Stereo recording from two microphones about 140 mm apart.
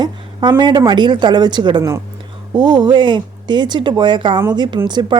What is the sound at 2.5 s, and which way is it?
Speech, 30° right (ahead or behind).